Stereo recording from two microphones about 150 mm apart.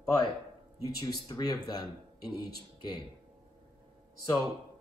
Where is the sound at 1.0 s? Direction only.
25° left (ahead or behind).